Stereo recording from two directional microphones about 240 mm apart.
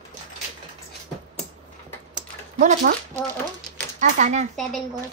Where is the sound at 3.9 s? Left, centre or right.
Right.